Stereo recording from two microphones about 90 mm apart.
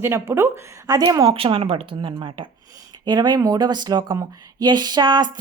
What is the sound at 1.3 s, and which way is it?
Speech, 90° right.